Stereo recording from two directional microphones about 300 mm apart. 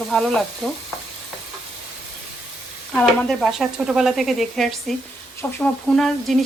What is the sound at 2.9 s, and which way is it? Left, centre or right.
Speech, centre.